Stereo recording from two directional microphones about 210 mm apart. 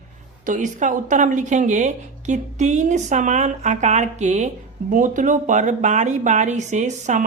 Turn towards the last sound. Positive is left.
turn(degrees=-35)  # may be behind; listen again after turning